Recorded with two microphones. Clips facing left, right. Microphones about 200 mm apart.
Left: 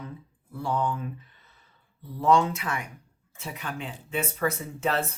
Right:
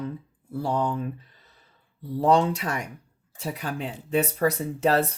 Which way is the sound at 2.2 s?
35° right (ahead or behind).